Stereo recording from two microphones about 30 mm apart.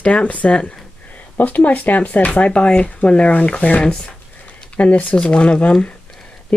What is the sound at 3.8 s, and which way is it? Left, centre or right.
Speech, left.